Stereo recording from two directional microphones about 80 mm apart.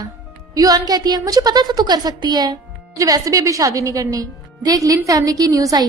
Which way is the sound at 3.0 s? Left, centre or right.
Right.